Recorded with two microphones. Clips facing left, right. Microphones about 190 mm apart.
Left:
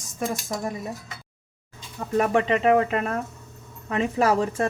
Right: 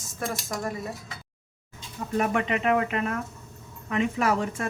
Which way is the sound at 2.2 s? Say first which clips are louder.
Left 5 dB; 30° left (ahead or behind).